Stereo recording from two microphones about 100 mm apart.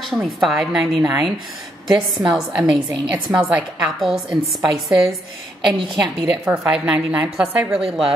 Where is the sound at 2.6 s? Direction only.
10° right (ahead or behind).